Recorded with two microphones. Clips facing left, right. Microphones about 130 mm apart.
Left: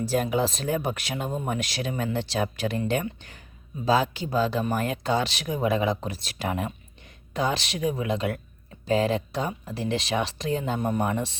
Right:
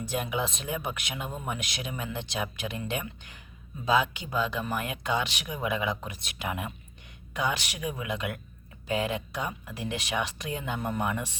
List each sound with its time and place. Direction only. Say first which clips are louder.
0.1 s speech: left 5 dB; 40° left (ahead or behind)